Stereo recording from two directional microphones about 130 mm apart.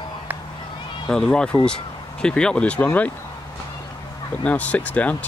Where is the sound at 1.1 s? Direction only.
5° left (ahead or behind).